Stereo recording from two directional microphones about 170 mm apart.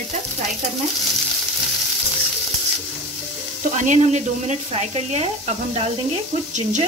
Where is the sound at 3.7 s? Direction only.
45° right (ahead or behind).